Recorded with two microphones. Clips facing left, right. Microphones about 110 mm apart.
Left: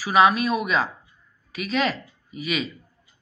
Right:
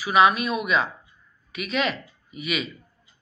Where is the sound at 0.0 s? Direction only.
35° left (ahead or behind).